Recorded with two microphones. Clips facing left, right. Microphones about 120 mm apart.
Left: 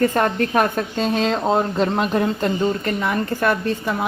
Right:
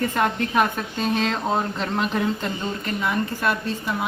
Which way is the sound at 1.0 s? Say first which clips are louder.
Left 3 dB; 35° left (ahead or behind).